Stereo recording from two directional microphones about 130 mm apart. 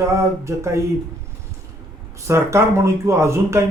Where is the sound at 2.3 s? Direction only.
20° right (ahead or behind).